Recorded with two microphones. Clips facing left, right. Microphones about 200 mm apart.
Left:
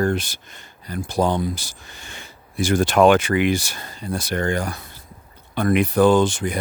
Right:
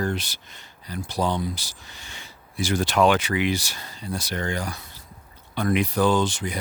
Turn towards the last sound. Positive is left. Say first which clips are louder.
# left 6 dB
turn(degrees=50)  # may be behind; listen again after turning